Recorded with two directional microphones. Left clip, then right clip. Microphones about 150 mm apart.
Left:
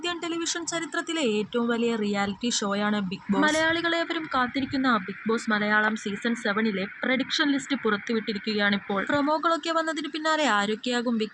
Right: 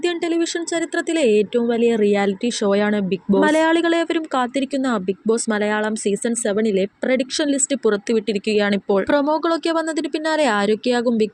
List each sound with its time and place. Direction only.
0.0 s speech: 30° right (ahead or behind)